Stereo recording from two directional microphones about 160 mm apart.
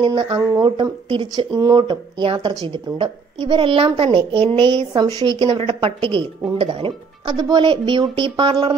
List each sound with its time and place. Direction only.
0.0 s a woman's voice: 30° right (ahead or behind)